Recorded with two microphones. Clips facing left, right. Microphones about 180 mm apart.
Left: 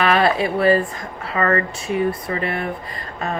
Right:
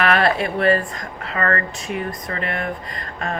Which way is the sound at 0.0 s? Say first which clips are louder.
Left 1 dB; 25° left (ahead or behind).